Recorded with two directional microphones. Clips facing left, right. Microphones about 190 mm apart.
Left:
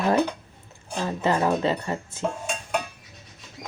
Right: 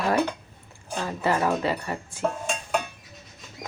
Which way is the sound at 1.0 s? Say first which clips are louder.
Left 1 dB; 20° left (ahead or behind).